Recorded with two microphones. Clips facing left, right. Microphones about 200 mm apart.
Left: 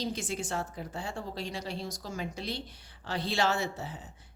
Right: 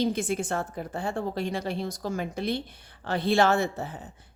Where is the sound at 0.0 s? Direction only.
55° right (ahead or behind).